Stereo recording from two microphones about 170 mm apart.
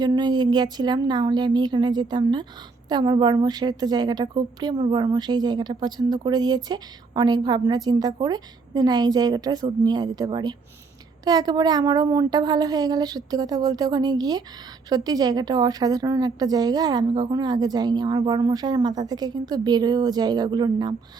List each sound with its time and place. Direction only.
0.0 s a woman's voice: 25° right (ahead or behind)